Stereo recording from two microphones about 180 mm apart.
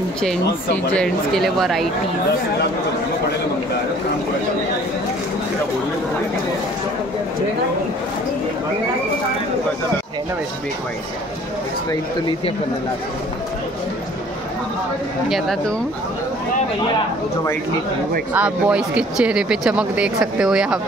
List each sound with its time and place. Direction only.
0.9 s speech: centre (ahead or behind)
11.9 s speech: 25° left (ahead or behind)
15.2 s speech: centre (ahead or behind)
18.3 s speech: 5° right (ahead or behind)